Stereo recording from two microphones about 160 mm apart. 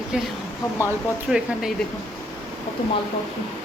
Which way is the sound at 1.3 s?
5° right (ahead or behind).